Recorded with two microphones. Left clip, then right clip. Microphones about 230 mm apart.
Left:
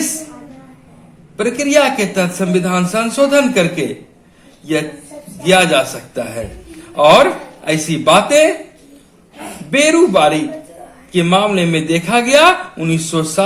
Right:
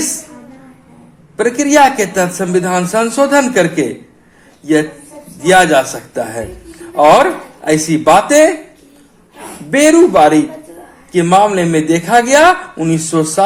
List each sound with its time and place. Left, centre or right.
1.4 s speech: right
5.4 s speech: right
7.6 s speech: right
9.7 s speech: right